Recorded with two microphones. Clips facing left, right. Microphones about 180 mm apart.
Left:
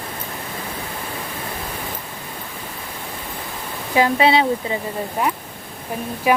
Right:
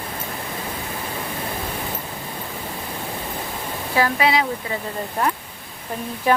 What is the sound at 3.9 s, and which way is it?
Speech, 25° left (ahead or behind).